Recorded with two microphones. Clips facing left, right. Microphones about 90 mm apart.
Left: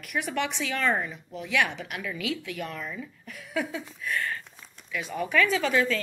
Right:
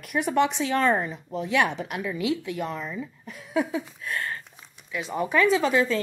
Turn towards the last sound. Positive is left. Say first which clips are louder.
# right 3 dB
turn(degrees=-25)  # may be behind; listen again after turning